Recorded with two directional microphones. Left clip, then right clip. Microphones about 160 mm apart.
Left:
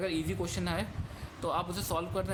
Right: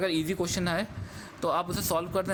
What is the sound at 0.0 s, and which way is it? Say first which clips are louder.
A man's voice: right 5 dB; 55° right (ahead or behind).